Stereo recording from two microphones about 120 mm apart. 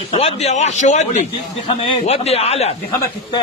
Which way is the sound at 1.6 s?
55° left (ahead or behind).